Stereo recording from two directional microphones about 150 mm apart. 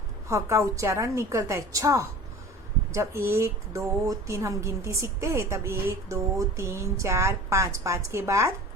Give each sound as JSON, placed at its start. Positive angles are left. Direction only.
{"t": 0.3, "sound": "speech", "side_deg": -20}